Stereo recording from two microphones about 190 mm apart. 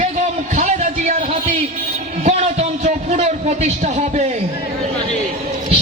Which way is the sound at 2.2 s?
35° right (ahead or behind).